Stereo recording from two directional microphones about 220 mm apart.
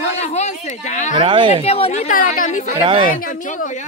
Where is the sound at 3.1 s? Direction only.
40° left (ahead or behind).